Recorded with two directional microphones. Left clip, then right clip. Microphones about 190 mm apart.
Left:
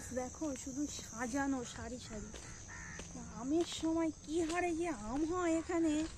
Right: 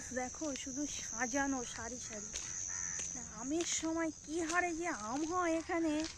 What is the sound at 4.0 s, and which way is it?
Speech, 30° right (ahead or behind).